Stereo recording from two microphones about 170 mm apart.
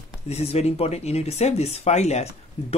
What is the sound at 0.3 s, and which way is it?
Speech, 35° left (ahead or behind).